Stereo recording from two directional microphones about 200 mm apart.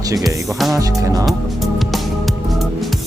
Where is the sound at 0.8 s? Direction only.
15° right (ahead or behind).